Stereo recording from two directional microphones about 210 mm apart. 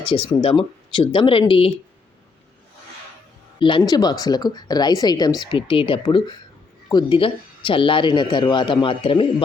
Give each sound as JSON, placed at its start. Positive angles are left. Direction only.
{"t": 0.3, "sound": "speech", "side_deg": 25}
{"t": 3.6, "sound": "speech", "side_deg": 25}